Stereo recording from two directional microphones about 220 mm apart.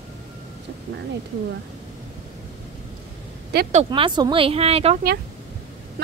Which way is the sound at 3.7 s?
25° right (ahead or behind).